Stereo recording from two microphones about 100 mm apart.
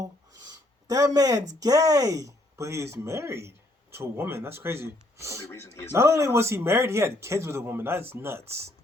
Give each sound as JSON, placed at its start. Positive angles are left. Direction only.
{"t": 0.0, "sound": "a man's voice", "side_deg": -35}
{"t": 5.5, "sound": "speech", "side_deg": 25}
{"t": 5.9, "sound": "a man's voice", "side_deg": -30}